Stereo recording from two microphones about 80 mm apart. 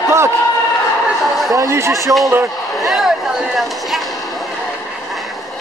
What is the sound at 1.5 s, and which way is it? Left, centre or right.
Speech, right.